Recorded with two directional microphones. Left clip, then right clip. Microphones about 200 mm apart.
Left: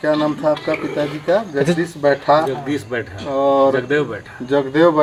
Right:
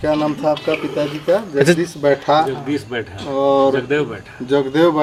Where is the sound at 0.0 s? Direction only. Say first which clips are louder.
Even; 20° right (ahead or behind).